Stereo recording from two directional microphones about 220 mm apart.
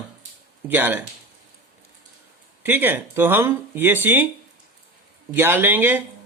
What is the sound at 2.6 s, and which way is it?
A man's voice, 10° right (ahead or behind).